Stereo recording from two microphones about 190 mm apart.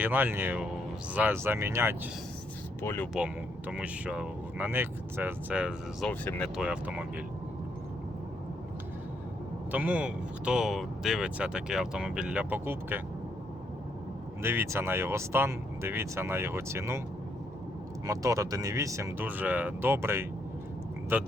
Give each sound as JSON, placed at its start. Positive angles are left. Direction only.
{"t": 0.0, "sound": "speech", "side_deg": -10}
{"t": 2.8, "sound": "speech", "side_deg": 10}
{"t": 3.7, "sound": "speech", "side_deg": -5}
{"t": 6.1, "sound": "speech", "side_deg": 5}
{"t": 6.6, "sound": "speech", "side_deg": -5}
{"t": 9.7, "sound": "speech", "side_deg": -5}
{"t": 14.4, "sound": "speech", "side_deg": -10}
{"t": 18.0, "sound": "speech", "side_deg": -15}